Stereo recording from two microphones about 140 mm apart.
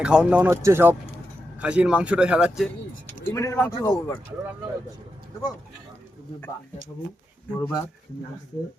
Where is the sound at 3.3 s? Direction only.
20° left (ahead or behind).